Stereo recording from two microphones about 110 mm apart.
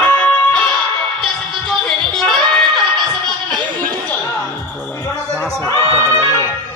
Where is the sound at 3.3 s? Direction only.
40° right (ahead or behind).